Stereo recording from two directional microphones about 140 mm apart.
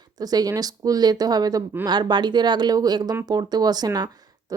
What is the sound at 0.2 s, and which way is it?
Speech, 25° right (ahead or behind).